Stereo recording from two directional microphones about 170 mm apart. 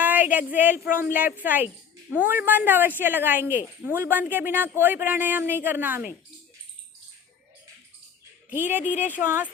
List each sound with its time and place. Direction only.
0.0 s speech: 10° right (ahead or behind)
8.4 s speech: 10° right (ahead or behind)